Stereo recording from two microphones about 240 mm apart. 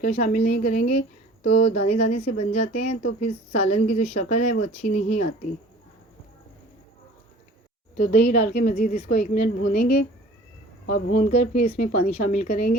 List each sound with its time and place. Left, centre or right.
0.2 s speech: left
7.9 s speech: left